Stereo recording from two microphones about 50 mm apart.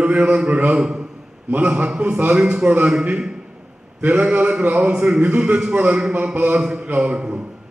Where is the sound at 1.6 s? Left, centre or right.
Right.